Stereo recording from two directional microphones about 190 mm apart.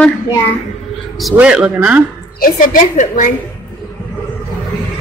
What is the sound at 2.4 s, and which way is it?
Speech, 45° left (ahead or behind).